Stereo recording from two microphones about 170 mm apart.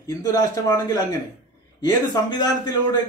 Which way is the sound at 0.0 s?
20° left (ahead or behind).